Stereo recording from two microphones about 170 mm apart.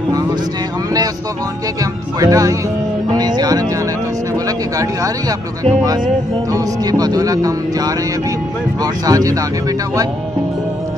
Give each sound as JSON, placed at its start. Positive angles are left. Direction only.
{"t": 2.1, "sound": "speech", "side_deg": -20}
{"t": 3.1, "sound": "music", "side_deg": -25}
{"t": 4.5, "sound": "speech", "side_deg": -20}
{"t": 6.5, "sound": "speech", "side_deg": -20}